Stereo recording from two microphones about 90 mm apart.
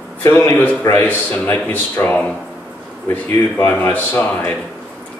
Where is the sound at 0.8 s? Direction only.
40° left (ahead or behind).